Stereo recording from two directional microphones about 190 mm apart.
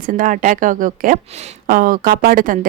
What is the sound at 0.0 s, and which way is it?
A woman's voice, 45° right (ahead or behind).